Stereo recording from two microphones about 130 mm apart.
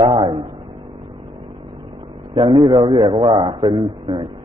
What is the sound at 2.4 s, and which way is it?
A man's voice, 40° right (ahead or behind).